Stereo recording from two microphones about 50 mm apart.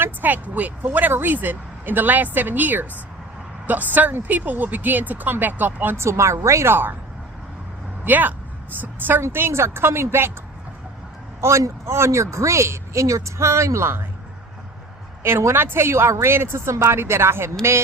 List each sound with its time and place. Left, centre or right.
0.0 s speech: right
6.0 s speech: right
6.7 s speech: right
8.0 s speech: right
9.3 s speech: right
11.3 s speech: right
15.2 s speech: right